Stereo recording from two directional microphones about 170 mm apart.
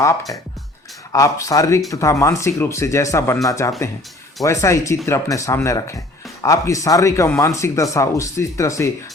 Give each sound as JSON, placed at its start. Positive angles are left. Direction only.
{"t": 0.0, "sound": "speech", "side_deg": 20}